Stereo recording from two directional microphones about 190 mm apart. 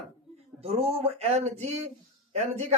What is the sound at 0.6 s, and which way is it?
Speech, 30° right (ahead or behind).